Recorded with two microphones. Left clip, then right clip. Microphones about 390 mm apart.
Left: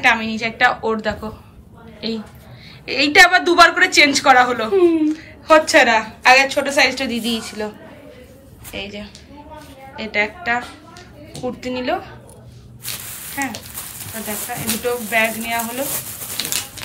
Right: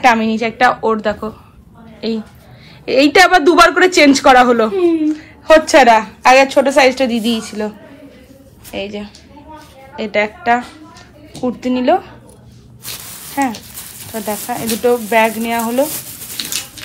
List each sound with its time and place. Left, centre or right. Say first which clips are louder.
0.0 s a woman's voice: right 4 dB; centre
8.7 s speech: right 6 dB; centre
13.3 s speech: right 7 dB; centre
16.3 s a sound: right 2 dB; left